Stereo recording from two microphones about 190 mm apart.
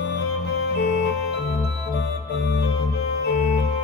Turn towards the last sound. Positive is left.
turn(degrees=65)  # may be behind; listen again after turning